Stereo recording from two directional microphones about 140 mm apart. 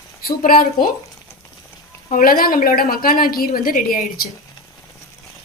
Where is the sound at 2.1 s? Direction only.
80° left.